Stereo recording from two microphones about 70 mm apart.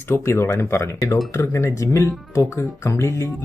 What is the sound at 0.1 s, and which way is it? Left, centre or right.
Speech, left.